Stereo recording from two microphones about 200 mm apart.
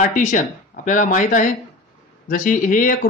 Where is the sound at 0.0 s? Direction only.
40° left (ahead or behind).